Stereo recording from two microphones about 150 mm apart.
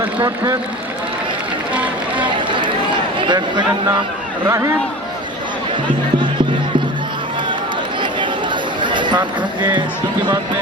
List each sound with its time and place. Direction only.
1.7 s run: 10° right (ahead or behind)
3.2 s speech: 30° right (ahead or behind)
4.4 s speech: 20° right (ahead or behind)
8.8 s speech: 30° right (ahead or behind)